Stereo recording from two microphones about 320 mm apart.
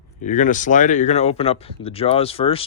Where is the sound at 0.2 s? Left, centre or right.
Left.